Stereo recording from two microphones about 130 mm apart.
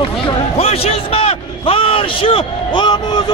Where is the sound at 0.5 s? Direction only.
50° left (ahead or behind).